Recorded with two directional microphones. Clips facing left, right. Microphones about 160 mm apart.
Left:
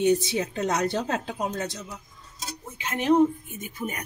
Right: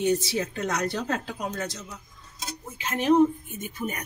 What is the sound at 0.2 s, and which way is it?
A woman's voice, 20° left (ahead or behind).